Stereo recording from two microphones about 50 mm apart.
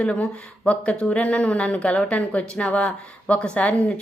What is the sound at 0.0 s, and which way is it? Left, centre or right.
Speech, left.